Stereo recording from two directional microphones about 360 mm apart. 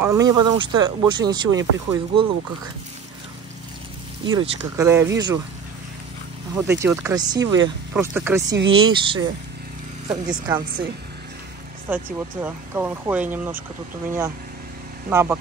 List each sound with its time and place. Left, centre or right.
0.0 s speech: centre
4.3 s speech: centre
6.7 s speech: centre
8.5 s speech: right
8.8 s speech: centre
11.9 s speech: centre